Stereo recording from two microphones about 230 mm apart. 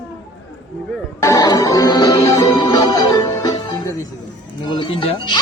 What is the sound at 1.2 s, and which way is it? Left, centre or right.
Music, centre.